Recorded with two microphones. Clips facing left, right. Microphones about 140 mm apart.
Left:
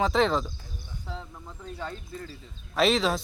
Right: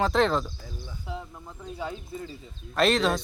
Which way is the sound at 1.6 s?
10° right (ahead or behind).